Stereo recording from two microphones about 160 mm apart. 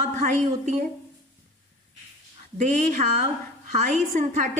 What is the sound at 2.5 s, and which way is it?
A woman's voice, 50° right (ahead or behind).